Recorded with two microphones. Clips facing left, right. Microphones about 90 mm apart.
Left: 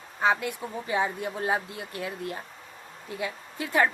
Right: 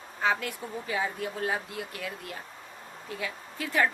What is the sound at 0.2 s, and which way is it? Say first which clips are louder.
A woman's voice: left 3 dB; 20° left (ahead or behind).